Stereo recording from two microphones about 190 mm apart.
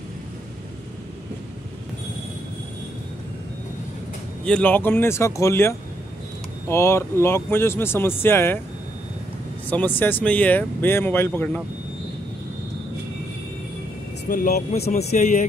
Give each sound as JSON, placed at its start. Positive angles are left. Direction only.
{"t": 4.5, "sound": "speech", "side_deg": 10}
{"t": 9.7, "sound": "speech", "side_deg": 10}
{"t": 14.3, "sound": "speech", "side_deg": 45}